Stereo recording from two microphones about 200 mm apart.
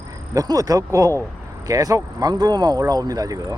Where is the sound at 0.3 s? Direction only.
20° right (ahead or behind).